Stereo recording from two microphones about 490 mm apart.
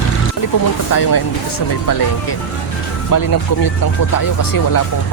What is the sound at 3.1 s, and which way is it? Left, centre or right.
Speech, left.